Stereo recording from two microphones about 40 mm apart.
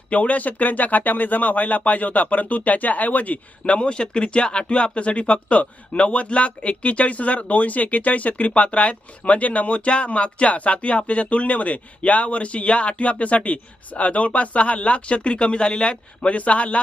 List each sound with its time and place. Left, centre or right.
0.1 s speech: left
3.8 s speech: left